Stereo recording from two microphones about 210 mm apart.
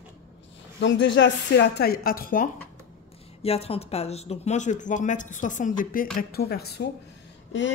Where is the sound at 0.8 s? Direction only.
60° left (ahead or behind); by 2.5 s 40° left (ahead or behind).